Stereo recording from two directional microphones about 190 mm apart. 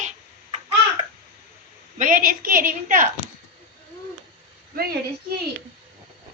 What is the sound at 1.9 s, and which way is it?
A woman's voice, 45° right (ahead or behind).